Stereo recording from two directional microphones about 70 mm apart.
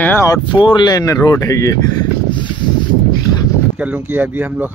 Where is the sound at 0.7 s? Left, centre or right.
Left.